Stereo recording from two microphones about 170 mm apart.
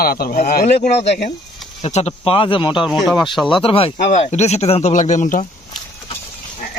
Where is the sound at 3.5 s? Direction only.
30° left (ahead or behind).